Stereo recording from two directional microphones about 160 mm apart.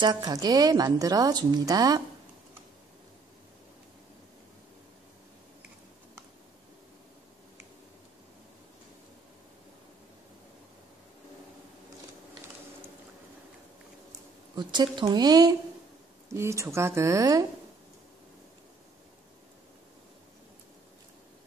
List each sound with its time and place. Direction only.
0.0 s a woman's voice: 25° right (ahead or behind)
14.5 s speech: 25° right (ahead or behind)